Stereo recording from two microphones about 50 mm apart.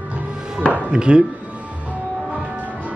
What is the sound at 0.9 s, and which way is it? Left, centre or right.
Speech, centre.